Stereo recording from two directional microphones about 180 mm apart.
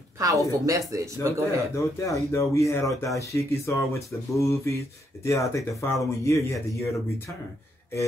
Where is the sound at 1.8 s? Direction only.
15° left (ahead or behind).